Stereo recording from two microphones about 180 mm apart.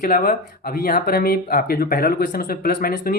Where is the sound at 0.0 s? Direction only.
50° left (ahead or behind).